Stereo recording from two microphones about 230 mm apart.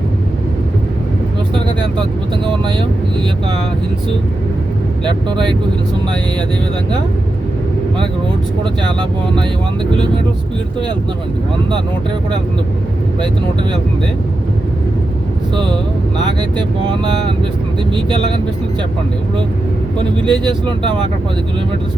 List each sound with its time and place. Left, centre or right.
2.5 s speech: right
5.0 s speech: right
17.9 s speech: right
20.2 s speech: centre